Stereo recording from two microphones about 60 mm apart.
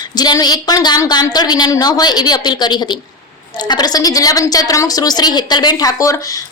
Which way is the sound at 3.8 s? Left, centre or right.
Left.